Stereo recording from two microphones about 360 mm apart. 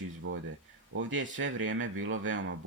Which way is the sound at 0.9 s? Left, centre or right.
Right.